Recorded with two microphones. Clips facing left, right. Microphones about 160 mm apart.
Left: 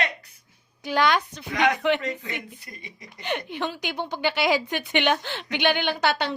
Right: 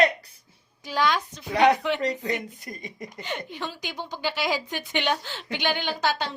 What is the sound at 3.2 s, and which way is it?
A woman's voice, 65° left (ahead or behind).